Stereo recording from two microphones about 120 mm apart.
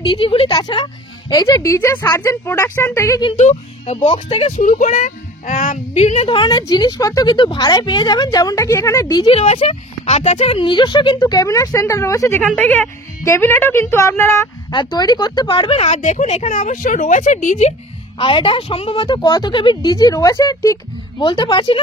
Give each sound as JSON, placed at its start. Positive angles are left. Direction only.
{"t": 0.0, "sound": "a woman's voice", "side_deg": 45}
{"t": 3.3, "sound": "speech", "side_deg": 75}
{"t": 6.2, "sound": "speech", "side_deg": 40}
{"t": 9.0, "sound": "speech", "side_deg": 35}
{"t": 9.3, "sound": "speech", "side_deg": 55}
{"t": 10.6, "sound": "speech", "side_deg": 40}
{"t": 12.5, "sound": "speech", "side_deg": 15}
{"t": 14.7, "sound": "speech", "side_deg": 40}
{"t": 15.8, "sound": "a woman's voice", "side_deg": 80}
{"t": 18.1, "sound": "a woman's voice", "side_deg": 45}
{"t": 19.1, "sound": "speech", "side_deg": 35}
{"t": 21.2, "sound": "speech", "side_deg": 40}